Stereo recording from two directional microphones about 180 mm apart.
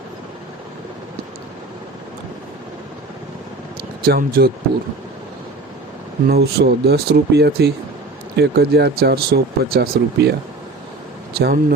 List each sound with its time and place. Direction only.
4.0 s speech: 55° right (ahead or behind)
6.2 s speech: 60° right (ahead or behind)
11.3 s speech: 60° right (ahead or behind)